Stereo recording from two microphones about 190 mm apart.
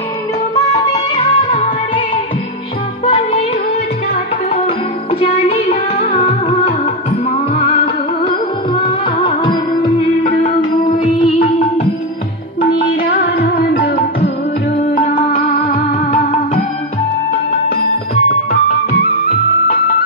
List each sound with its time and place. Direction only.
1.1 s music: 25° left (ahead or behind)
3.1 s music: 30° left (ahead or behind)
5.2 s music: 30° left (ahead or behind)
7.5 s music: 25° left (ahead or behind)
10.2 s music: 40° left (ahead or behind)
13.4 s music: 50° left (ahead or behind)
15.1 s music: 30° left (ahead or behind)